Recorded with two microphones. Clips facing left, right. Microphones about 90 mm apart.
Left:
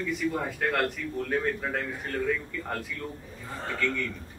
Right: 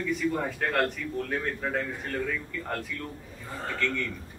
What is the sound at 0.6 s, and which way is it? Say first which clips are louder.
A man's voice: even; 5° right (ahead or behind).